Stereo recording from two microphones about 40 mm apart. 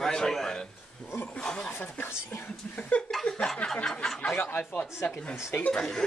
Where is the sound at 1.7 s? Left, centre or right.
Left.